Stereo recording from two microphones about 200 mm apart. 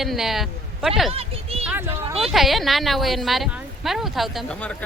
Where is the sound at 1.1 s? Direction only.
30° right (ahead or behind).